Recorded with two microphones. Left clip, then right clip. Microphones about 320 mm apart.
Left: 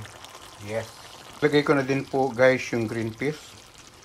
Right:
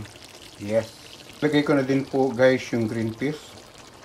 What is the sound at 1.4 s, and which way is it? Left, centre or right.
Cutlery, centre.